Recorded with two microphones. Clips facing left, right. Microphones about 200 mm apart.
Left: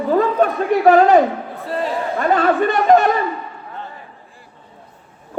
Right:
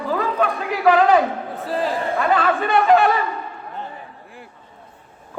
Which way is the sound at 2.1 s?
45° left (ahead or behind).